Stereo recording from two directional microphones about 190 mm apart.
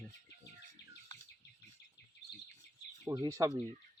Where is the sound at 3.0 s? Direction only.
20° right (ahead or behind).